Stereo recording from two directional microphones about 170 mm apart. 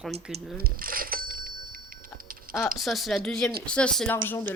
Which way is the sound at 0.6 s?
60° right (ahead or behind).